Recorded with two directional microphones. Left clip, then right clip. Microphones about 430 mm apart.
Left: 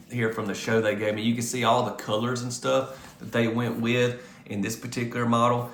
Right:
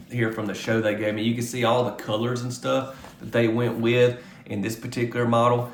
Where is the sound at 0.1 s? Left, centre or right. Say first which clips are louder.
Right 1 dB; centre.